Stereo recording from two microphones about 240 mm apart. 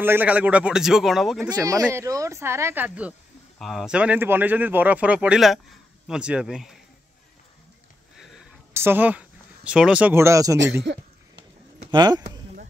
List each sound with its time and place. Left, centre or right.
0.0 s a man's voice: centre
1.5 s a man's voice: centre
8.7 s speech: centre
10.6 s speech: right
11.9 s speech: centre